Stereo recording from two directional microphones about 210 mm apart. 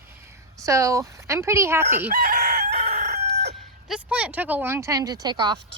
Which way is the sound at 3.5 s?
5° right (ahead or behind).